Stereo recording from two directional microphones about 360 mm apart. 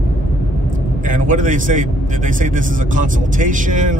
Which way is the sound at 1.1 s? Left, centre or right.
Right.